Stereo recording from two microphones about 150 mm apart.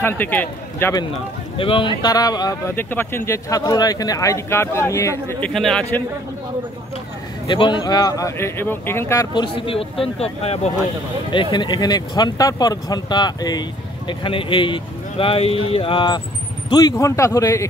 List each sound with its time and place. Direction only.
0.0 s a man's voice: 10° left (ahead or behind)
1.6 s speech: 35° left (ahead or behind)
2.7 s speech: 15° left (ahead or behind)
5.5 s a man's voice: 5° left (ahead or behind)
7.4 s speech: 35° left (ahead or behind)
9.3 s speech: 30° left (ahead or behind)
11.3 s speech: 30° left (ahead or behind)